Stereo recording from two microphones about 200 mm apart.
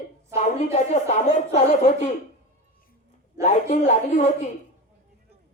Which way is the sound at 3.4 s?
35° left (ahead or behind).